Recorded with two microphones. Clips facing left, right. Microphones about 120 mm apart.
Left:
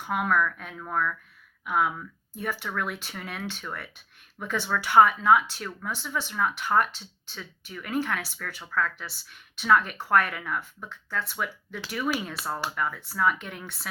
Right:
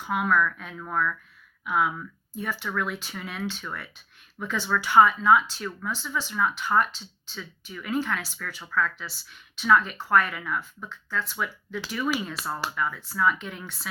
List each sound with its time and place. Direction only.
0.0 s speech: 50° left (ahead or behind)